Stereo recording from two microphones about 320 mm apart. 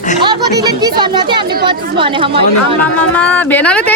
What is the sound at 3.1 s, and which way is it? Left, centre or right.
Speech, centre.